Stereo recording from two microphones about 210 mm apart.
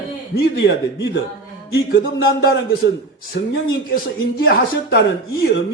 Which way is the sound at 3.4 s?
55° left (ahead or behind).